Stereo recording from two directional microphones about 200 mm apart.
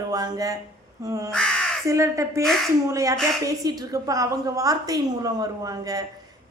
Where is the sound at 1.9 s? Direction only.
15° right (ahead or behind).